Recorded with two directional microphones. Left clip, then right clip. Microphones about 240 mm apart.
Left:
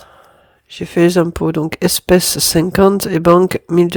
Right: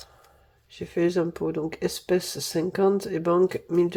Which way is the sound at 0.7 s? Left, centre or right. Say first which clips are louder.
Left 12 dB; left.